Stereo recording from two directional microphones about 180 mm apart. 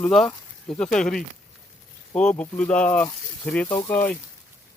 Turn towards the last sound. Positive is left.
turn(degrees=10)  # may be behind; listen again after turning